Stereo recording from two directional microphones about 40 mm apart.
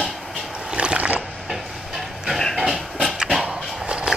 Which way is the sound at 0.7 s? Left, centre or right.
Right.